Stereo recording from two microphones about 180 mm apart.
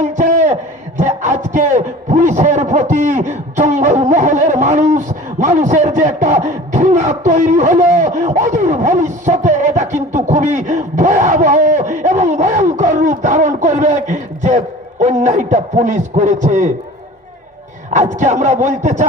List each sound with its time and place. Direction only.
0.0 s a sound: 45° right (ahead or behind)
0.9 s a man's voice: 40° right (ahead or behind)
17.9 s speech: 40° right (ahead or behind)